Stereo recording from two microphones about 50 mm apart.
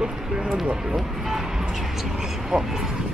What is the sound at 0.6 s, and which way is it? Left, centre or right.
Speech, centre.